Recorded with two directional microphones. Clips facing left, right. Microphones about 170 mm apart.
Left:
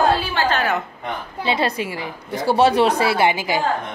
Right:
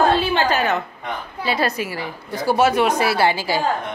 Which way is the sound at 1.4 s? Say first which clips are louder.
Left 1 dB; 25° left (ahead or behind).